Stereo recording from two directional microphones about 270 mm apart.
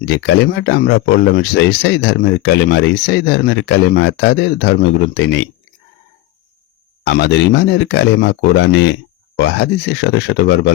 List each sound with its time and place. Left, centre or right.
0.1 s speech: left
7.0 s speech: left